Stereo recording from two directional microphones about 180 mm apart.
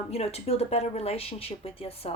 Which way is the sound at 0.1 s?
35° left (ahead or behind).